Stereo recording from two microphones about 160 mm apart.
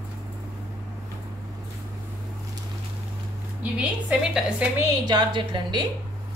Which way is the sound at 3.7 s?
5° right (ahead or behind).